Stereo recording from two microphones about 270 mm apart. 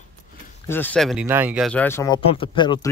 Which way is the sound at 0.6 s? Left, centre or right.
Centre.